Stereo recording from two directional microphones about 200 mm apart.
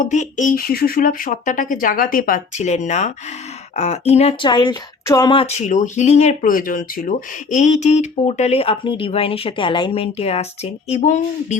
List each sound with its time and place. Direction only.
0.0 s speech: 35° left (ahead or behind)